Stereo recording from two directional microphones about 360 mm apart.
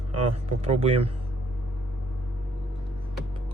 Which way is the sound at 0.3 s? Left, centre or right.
Centre.